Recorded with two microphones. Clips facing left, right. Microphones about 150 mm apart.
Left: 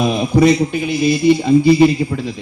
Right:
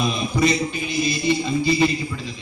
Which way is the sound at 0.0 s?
60° left (ahead or behind).